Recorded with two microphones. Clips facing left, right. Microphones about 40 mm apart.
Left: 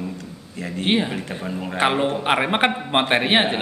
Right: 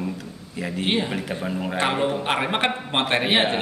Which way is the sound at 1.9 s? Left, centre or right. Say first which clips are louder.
Left 2 dB; centre.